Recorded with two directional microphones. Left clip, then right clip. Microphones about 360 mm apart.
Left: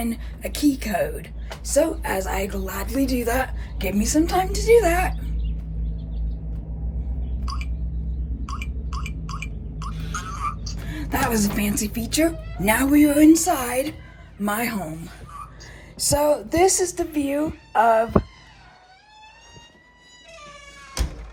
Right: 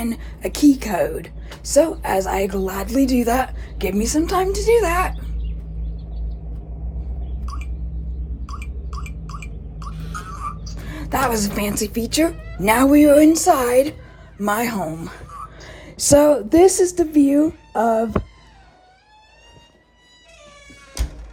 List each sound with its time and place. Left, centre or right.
0.0 s a woman's voice: centre
8.9 s a sound: left
10.8 s a woman's voice: centre
15.7 s a woman's voice: right